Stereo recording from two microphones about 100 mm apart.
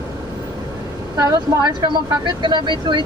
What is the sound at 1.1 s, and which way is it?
Speech, 35° right (ahead or behind).